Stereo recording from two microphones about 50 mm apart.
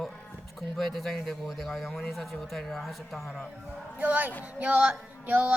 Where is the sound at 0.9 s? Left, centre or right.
Centre.